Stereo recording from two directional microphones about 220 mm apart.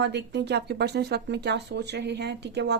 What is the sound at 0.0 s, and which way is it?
Speech, 50° right (ahead or behind).